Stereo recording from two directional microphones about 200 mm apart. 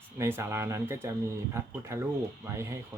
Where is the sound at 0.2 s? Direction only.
15° right (ahead or behind).